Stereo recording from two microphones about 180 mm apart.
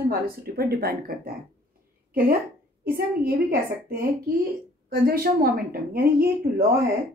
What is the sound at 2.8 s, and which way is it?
A woman's voice, 55° right (ahead or behind).